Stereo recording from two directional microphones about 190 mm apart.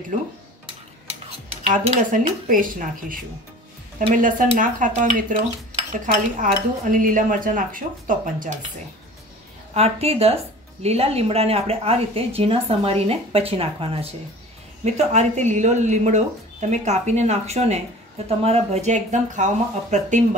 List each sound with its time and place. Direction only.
1.7 s speech: 45° right (ahead or behind)
9.8 s speech: 35° right (ahead or behind)